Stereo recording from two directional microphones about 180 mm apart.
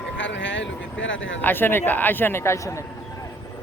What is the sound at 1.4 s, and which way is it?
A man's voice, 10° left (ahead or behind).